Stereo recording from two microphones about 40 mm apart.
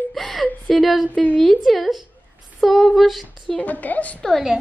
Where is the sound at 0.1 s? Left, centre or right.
Centre.